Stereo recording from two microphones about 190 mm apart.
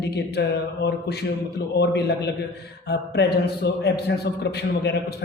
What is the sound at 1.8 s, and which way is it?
A woman's voice, 60° left (ahead or behind).